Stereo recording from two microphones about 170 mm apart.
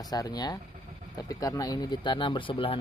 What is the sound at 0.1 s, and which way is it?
Speech, 25° left (ahead or behind).